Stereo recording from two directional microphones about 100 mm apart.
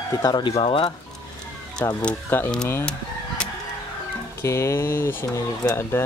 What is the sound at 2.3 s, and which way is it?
Speech, 20° left (ahead or behind).